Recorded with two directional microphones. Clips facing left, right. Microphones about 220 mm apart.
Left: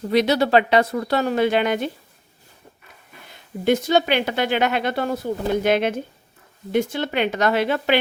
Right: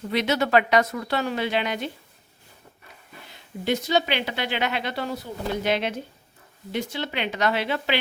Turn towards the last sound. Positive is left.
turn(degrees=50)  # may be behind; listen again after turning